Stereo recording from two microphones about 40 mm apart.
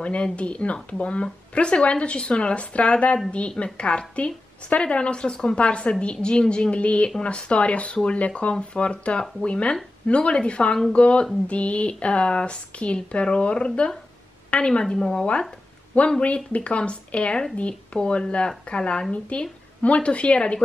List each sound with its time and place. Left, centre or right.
0.0 s a woman's voice: left
15.9 s a woman's voice: left